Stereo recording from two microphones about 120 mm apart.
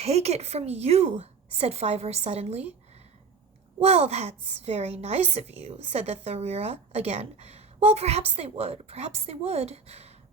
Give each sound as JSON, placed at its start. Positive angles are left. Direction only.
{"t": 0.0, "sound": "a woman's voice", "side_deg": -60}
{"t": 3.8, "sound": "a woman's voice", "side_deg": -60}